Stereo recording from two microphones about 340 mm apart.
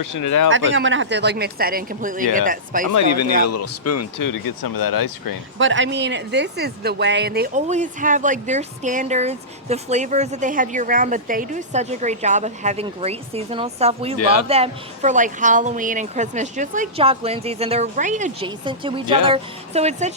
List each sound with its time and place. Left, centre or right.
0.0 s speech: left
0.4 s speech: right
2.9 s speech: left
4.2 s speech: left
5.5 s speech: right; by 14.2 s centre
14.2 s speech: left
14.4 s speech: centre